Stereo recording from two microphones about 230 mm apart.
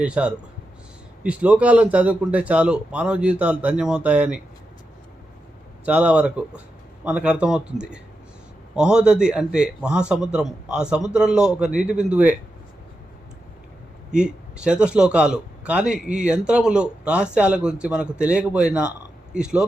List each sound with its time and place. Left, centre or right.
0.0 s a man's voice: centre
5.8 s a man's voice: centre
14.1 s a man's voice: centre